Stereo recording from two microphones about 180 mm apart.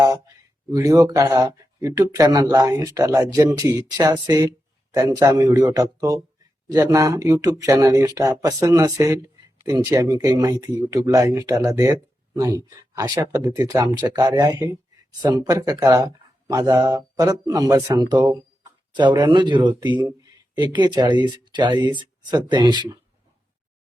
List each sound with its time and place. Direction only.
0.7 s speech: 20° right (ahead or behind)